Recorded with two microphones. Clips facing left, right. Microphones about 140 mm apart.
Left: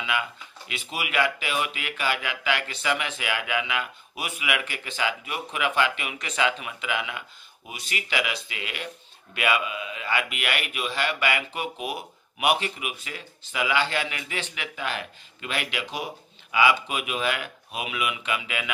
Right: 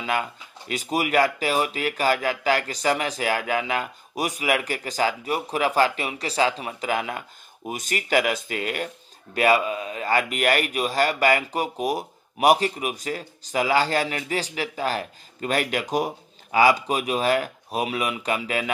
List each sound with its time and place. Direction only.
0.0 s speech: 40° right (ahead or behind)